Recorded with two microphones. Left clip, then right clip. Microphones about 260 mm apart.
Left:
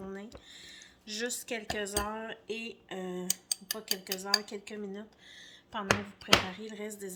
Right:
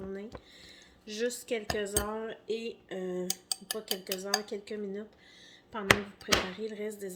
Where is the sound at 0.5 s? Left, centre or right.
Left.